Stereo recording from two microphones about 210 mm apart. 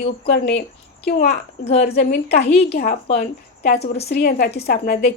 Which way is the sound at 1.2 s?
30° left (ahead or behind).